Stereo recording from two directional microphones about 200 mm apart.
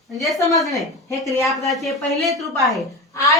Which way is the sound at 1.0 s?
15° left (ahead or behind).